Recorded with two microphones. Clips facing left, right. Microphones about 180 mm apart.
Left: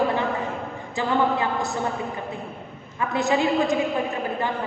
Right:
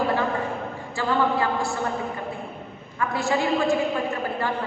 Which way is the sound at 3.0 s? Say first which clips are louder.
Left 2 dB; 20° left (ahead or behind).